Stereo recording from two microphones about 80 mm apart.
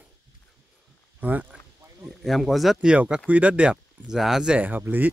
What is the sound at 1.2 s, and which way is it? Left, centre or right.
Speech, right.